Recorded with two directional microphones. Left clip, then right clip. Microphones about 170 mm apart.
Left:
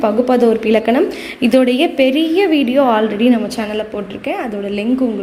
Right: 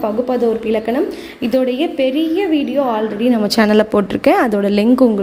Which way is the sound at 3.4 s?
55° right (ahead or behind).